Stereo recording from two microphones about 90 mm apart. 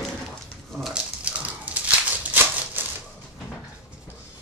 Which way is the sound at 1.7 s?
20° right (ahead or behind).